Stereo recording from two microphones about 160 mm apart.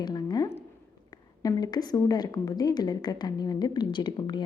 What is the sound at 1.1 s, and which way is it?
A woman's voice, 25° left (ahead or behind).